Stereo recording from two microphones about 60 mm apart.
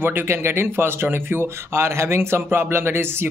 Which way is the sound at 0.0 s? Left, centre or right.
Right.